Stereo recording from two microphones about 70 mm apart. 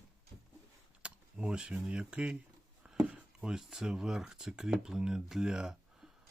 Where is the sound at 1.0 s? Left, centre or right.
Centre.